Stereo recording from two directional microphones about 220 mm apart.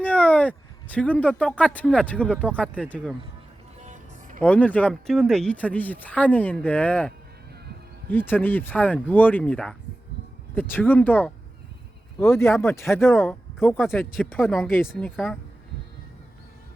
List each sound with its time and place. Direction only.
0.0 s speech: 5° left (ahead or behind)
3.8 s music: 35° right (ahead or behind)
4.4 s speech: 5° left (ahead or behind)
8.1 s speech: 10° left (ahead or behind)